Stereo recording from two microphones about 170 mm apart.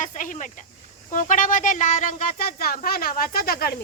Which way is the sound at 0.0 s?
50° left (ahead or behind).